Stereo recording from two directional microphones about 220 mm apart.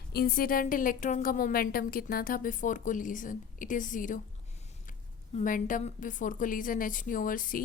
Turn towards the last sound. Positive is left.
turn(degrees=40)  # may be behind; listen again after turning